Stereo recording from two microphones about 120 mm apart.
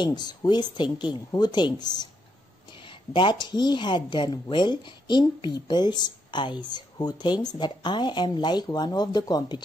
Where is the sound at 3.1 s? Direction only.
40° left (ahead or behind).